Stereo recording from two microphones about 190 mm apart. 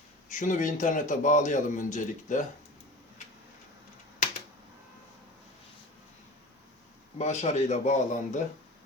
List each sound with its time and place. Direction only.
0.3 s a man's voice: 40° left (ahead or behind)
7.2 s a man's voice: 35° left (ahead or behind)